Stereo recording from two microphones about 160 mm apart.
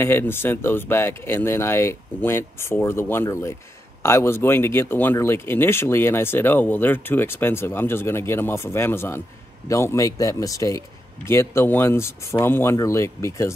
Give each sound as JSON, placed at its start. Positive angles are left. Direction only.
{"t": 0.0, "sound": "speech", "side_deg": 15}